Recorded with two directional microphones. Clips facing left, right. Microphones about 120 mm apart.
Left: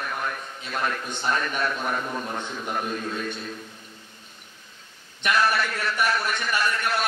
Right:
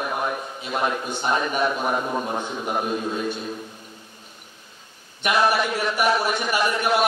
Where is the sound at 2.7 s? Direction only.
20° right (ahead or behind).